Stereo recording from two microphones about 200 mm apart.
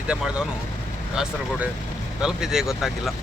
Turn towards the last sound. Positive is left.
turn(degrees=0)  # may be behind; listen again after turning